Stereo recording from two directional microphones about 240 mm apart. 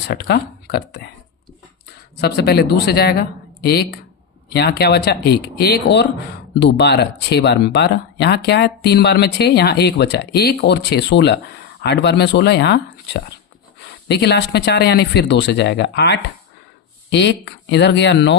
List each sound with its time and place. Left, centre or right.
0.1 s speech: left
2.2 s speech: left